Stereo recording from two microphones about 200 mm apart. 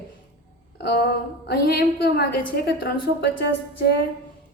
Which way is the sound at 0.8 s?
50° left (ahead or behind).